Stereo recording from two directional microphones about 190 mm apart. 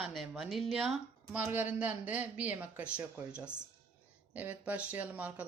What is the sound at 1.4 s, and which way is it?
A man's voice, 10° right (ahead or behind).